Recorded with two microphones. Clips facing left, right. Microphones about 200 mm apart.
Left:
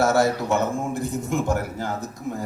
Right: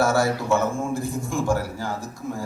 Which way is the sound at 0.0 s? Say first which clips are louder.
Left 1 dB; 20° left (ahead or behind).